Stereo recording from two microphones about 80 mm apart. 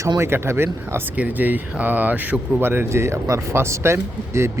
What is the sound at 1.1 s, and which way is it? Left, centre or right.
Speech, centre.